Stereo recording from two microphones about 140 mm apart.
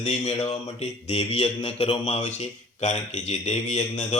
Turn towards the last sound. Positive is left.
turn(degrees=55)  # may be behind; listen again after turning